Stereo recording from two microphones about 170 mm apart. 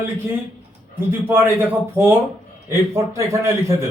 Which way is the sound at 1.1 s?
15° right (ahead or behind).